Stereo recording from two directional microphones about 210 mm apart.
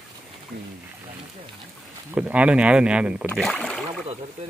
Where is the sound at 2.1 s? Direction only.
5° right (ahead or behind).